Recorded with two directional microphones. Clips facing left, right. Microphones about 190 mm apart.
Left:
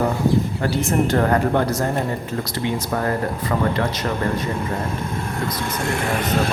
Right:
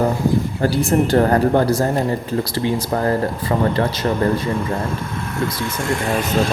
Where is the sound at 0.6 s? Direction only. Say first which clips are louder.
Right 3 dB; 35° right (ahead or behind).